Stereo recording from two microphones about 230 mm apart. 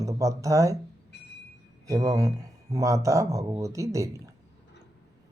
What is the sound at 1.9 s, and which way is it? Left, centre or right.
Speech, centre.